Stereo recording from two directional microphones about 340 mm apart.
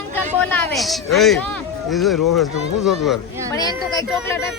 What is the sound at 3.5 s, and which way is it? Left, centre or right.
Speech, centre.